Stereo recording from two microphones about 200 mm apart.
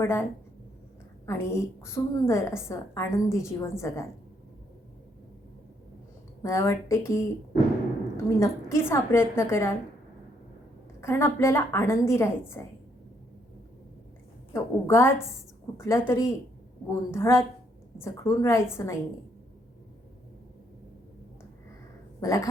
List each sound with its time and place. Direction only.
0.0 s a woman's voice: 10° left (ahead or behind)
1.3 s a woman's voice: 15° left (ahead or behind)
6.4 s a woman's voice: 15° left (ahead or behind)
11.0 s a woman's voice: 15° left (ahead or behind)
14.5 s a woman's voice: 15° left (ahead or behind)
22.2 s speech: 15° left (ahead or behind)